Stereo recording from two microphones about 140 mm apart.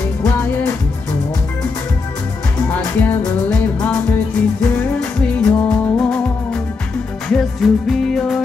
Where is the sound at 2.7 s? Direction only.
15° left (ahead or behind).